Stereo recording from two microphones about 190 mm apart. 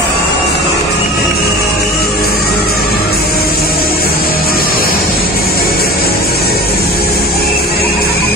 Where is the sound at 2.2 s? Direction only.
55° left (ahead or behind).